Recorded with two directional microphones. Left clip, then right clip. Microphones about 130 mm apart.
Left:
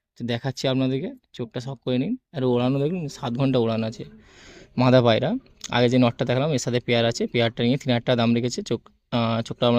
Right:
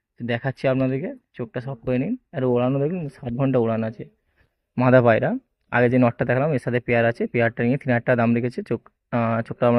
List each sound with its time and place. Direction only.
0.2 s speech: 10° left (ahead or behind)